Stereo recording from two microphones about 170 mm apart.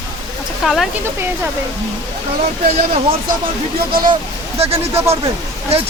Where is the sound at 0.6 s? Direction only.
Centre (ahead or behind).